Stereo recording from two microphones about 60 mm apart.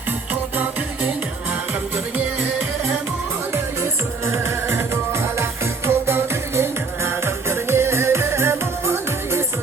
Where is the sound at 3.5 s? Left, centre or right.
Right.